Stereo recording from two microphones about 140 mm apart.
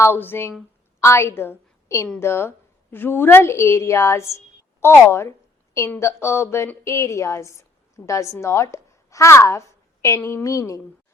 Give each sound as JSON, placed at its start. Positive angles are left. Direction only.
{"t": 0.0, "sound": "a woman's voice", "side_deg": 15}